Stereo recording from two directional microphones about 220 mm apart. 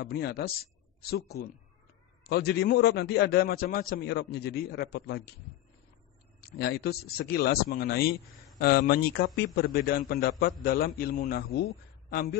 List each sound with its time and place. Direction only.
0.0 s a man's voice: 45° left (ahead or behind)
6.4 s a man's voice: 45° left (ahead or behind)